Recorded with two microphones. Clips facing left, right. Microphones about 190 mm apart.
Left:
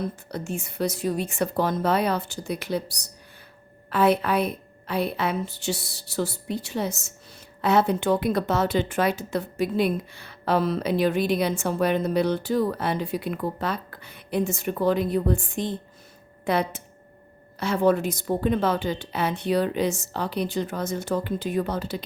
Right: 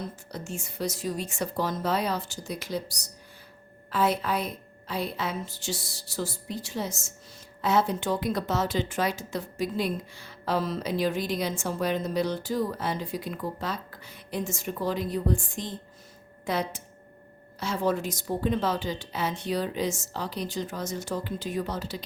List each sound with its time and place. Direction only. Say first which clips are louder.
0.0 s a woman's voice: left 6 dB; 60° left (ahead or behind)